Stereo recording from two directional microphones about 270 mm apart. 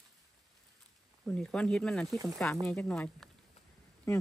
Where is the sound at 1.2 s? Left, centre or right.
Centre.